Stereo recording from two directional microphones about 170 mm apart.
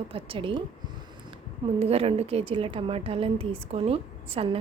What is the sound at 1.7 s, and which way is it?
A woman's voice, 35° right (ahead or behind).